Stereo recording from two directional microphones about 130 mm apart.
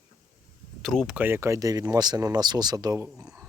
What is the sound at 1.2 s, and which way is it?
Speech, 15° right (ahead or behind).